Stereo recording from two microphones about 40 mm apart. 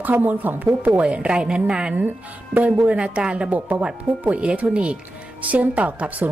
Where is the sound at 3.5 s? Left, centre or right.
Right.